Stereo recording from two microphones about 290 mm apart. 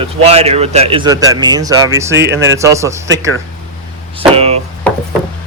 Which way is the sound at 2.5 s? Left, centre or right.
Centre.